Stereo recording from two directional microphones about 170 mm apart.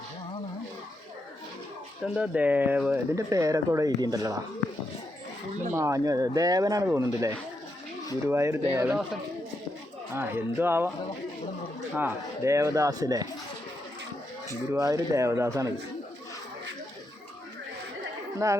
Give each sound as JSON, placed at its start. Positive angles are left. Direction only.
{"t": 2.1, "sound": "speech", "side_deg": -5}
{"t": 5.7, "sound": "speech", "side_deg": -20}
{"t": 10.1, "sound": "speech", "side_deg": -15}
{"t": 11.9, "sound": "speech", "side_deg": -15}
{"t": 14.7, "sound": "speech", "side_deg": -20}
{"t": 18.4, "sound": "speech", "side_deg": -20}